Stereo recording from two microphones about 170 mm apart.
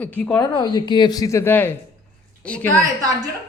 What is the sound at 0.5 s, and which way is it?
Speech, 25° left (ahead or behind).